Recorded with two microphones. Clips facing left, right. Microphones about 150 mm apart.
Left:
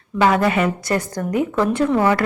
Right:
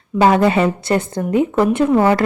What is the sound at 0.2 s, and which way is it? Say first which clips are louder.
A woman's voice: right 4 dB; 25° right (ahead or behind).